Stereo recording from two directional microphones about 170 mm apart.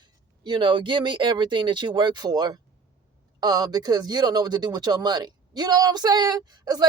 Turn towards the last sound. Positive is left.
turn(degrees=-25)  # may be behind; listen again after turning